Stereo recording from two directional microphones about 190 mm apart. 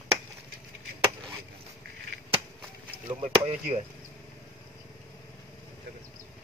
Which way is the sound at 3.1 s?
30° right (ahead or behind).